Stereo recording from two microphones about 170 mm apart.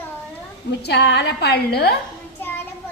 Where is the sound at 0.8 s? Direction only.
75° left (ahead or behind).